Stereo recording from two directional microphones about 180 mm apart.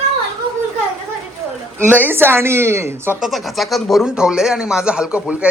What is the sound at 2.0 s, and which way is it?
A woman's voice, 10° right (ahead or behind).